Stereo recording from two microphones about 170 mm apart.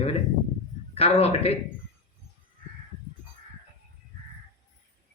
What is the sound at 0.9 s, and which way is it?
Speech, 35° left (ahead or behind).